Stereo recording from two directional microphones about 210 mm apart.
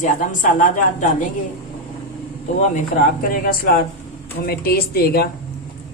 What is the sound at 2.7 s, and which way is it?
Speech, 45° left (ahead or behind).